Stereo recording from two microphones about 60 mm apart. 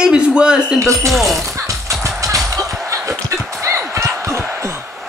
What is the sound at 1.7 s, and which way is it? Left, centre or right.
Music, right.